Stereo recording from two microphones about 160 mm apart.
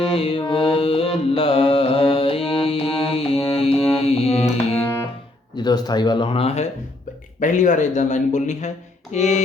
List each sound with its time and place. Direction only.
0.1 s mantra: 35° left (ahead or behind)
5.5 s speech: 25° left (ahead or behind)
7.3 s speech: 50° left (ahead or behind)